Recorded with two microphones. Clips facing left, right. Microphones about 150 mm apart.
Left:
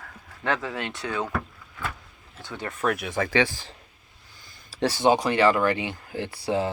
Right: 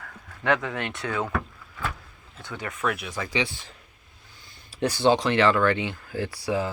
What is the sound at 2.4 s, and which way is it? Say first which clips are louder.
Speech: left 1 dB; 25° left (ahead or behind).